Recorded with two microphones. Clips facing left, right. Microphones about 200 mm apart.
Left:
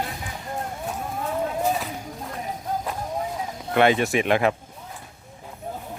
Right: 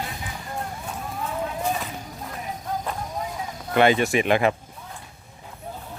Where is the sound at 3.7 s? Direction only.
Centre (ahead or behind).